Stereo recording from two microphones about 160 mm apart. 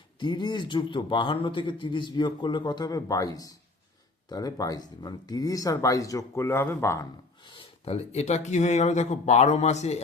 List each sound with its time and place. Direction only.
0.2 s a man's voice: 30° left (ahead or behind)
7.4 s speech: 30° left (ahead or behind)